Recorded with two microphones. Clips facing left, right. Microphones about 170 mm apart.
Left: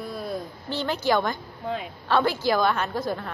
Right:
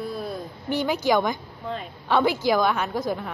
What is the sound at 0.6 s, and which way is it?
A woman's voice, 10° right (ahead or behind).